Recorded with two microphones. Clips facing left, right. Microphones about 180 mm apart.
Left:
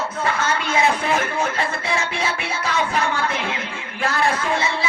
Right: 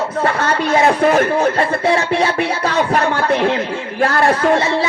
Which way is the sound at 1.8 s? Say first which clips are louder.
Right 9 dB; 65° right (ahead or behind).